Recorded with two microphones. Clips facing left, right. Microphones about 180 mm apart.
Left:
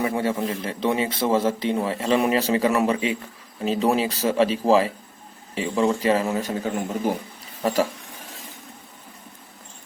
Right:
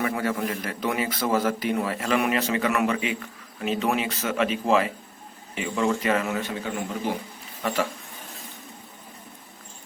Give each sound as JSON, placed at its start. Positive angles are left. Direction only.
{"t": 0.0, "sound": "a man's voice", "side_deg": 25}